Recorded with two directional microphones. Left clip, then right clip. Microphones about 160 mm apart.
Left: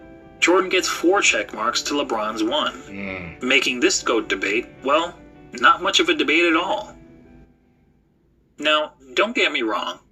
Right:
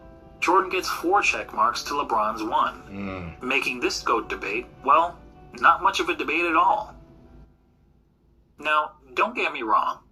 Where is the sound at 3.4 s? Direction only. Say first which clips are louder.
Left 6 dB; 30° left (ahead or behind).